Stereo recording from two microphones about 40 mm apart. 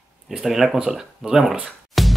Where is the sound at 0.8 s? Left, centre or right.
Right.